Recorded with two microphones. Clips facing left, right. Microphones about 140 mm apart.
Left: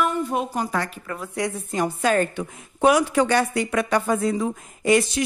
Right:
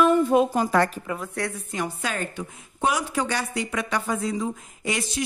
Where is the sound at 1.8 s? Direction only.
45° left (ahead or behind).